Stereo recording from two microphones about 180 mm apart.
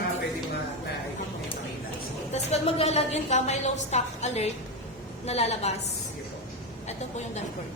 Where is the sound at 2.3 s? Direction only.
35° left (ahead or behind).